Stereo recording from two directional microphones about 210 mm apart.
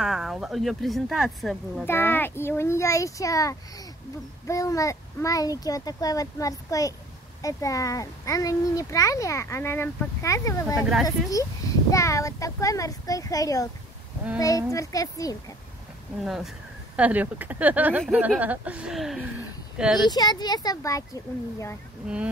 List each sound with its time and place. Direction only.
0.0 s speech: centre (ahead or behind)
1.9 s speech: 10° left (ahead or behind)
10.8 s speech: centre (ahead or behind)
11.1 s speech: 15° left (ahead or behind)
14.7 s speech: 15° left (ahead or behind)
16.3 s speech: centre (ahead or behind)
20.1 s speech: 20° left (ahead or behind)
22.0 s speech: 5° right (ahead or behind)